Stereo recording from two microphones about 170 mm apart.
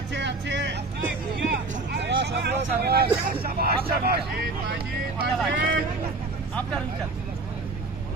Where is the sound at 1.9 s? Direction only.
85° right.